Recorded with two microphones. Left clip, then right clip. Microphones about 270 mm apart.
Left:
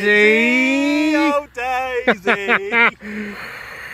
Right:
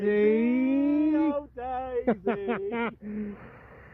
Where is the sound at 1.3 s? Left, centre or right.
Centre.